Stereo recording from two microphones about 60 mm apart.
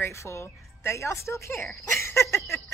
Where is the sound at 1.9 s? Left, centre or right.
Left.